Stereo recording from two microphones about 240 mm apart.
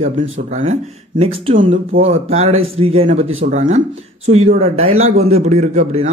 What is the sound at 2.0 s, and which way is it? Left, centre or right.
Speech, right.